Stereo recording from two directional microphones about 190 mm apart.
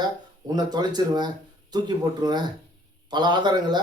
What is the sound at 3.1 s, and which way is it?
Speech, 25° right (ahead or behind).